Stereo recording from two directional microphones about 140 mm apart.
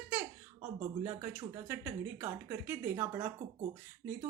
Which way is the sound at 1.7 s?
15° right (ahead or behind).